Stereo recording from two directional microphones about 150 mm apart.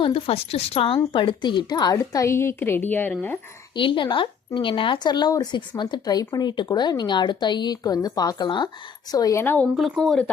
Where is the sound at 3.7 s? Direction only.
35° left (ahead or behind).